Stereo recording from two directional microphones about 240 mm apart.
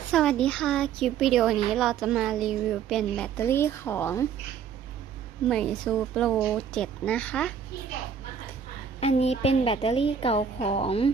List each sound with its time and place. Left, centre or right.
0.1 s speech: centre
5.5 s speech: centre
9.0 s a woman's voice: left